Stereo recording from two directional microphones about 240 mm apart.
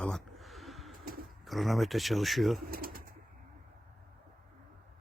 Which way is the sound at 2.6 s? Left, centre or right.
Right.